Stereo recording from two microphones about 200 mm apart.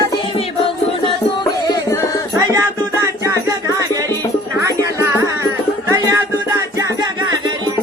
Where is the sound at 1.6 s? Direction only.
15° left (ahead or behind).